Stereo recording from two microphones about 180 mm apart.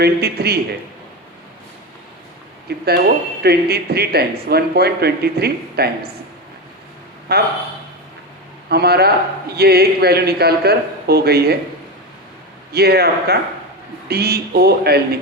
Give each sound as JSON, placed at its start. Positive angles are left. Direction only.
{"t": 0.0, "sound": "speech", "side_deg": -60}
{"t": 2.6, "sound": "speech", "side_deg": -60}
{"t": 7.3, "sound": "speech", "side_deg": -60}
{"t": 8.7, "sound": "speech", "side_deg": -60}
{"t": 12.7, "sound": "speech", "side_deg": -60}